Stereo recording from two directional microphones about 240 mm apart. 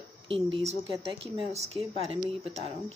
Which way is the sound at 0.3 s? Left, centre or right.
Right.